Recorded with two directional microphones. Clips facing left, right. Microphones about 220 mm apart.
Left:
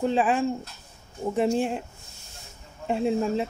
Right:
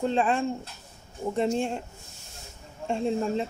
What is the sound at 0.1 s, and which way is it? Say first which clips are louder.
Speech: left 2 dB; 5° left (ahead or behind).